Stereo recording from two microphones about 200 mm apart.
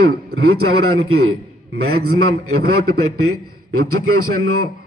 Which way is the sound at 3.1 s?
90° right.